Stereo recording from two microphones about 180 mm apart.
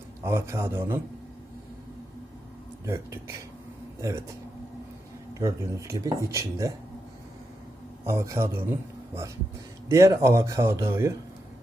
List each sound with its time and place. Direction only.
0.2 s speech: 15° right (ahead or behind)
2.8 s speech: 15° right (ahead or behind)
5.3 s speech: 15° right (ahead or behind)
8.0 s speech: 15° right (ahead or behind)